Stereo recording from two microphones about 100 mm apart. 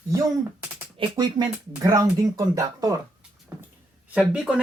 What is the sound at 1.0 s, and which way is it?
Speech, 60° right (ahead or behind).